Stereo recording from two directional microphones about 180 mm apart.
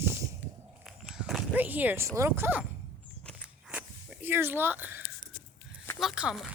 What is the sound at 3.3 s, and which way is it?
Walk, 5° right (ahead or behind).